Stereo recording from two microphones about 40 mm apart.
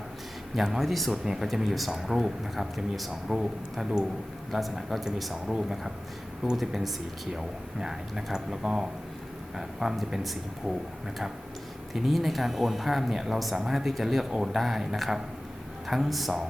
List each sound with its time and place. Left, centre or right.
0.5 s speech: centre
1.1 s speech: centre
3.2 s speech: centre
6.6 s speech: centre
11.9 s speech: centre
14.3 s speech: centre